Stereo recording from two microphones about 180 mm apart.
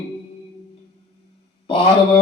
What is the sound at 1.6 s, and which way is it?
Mantra, 35° left (ahead or behind).